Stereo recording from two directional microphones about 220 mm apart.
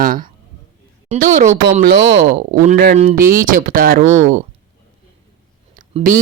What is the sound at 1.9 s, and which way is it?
Speech, 45° right (ahead or behind).